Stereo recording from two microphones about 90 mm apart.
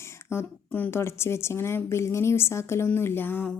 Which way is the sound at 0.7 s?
20° left (ahead or behind).